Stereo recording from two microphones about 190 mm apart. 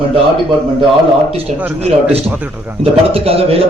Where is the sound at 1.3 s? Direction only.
35° right (ahead or behind).